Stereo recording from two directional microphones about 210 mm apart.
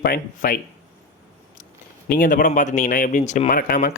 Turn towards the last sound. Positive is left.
turn(degrees=45)  # may be behind; listen again after turning